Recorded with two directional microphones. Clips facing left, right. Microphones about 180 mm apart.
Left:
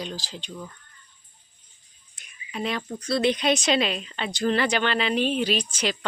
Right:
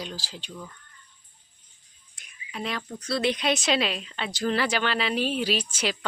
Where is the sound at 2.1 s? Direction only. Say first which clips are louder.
Left 3 dB; centre (ahead or behind).